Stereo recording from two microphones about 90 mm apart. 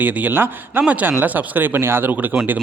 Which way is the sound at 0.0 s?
20° right (ahead or behind).